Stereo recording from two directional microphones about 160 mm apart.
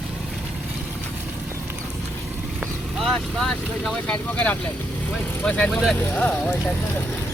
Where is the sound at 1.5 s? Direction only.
20° right (ahead or behind).